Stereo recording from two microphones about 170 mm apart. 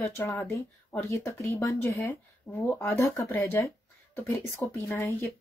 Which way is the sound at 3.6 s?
15° left (ahead or behind).